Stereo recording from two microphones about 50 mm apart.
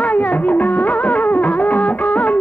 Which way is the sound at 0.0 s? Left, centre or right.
Left.